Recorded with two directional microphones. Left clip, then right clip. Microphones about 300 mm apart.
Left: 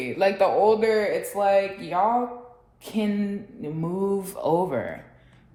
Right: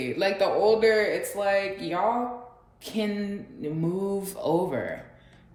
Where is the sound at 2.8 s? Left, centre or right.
Centre.